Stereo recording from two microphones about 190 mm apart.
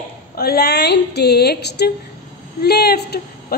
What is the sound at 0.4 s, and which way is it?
A woman's voice, 55° left (ahead or behind).